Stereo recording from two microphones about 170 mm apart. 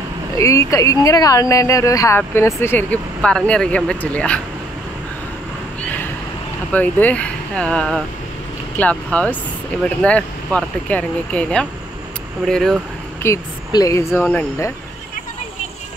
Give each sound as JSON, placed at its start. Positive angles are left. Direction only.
{"t": 0.4, "sound": "speech", "side_deg": 20}
{"t": 6.7, "sound": "speech", "side_deg": 10}
{"t": 13.2, "sound": "speech", "side_deg": 20}